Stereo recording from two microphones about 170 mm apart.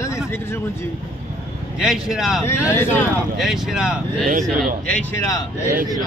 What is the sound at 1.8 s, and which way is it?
Speech, 5° right (ahead or behind).